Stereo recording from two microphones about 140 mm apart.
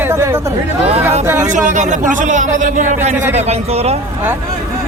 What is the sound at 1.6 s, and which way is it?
Speech, 60° right (ahead or behind).